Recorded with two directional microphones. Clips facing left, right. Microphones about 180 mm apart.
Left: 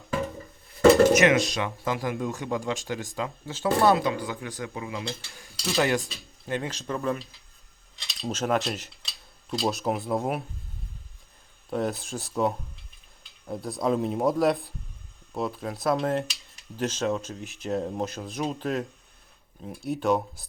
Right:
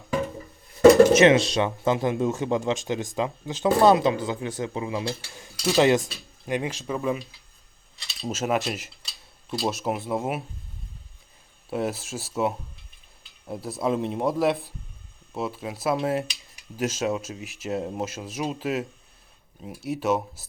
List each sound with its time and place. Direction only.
1.1 s speech: 30° right (ahead or behind)
5.7 s speech: 20° right (ahead or behind)
8.0 s mechanisms: 5° right (ahead or behind)
9.5 s speech: centre (ahead or behind)
11.7 s speech: 5° right (ahead or behind)